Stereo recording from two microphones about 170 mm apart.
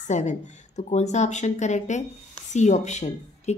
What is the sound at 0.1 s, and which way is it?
Speech, 45° left (ahead or behind).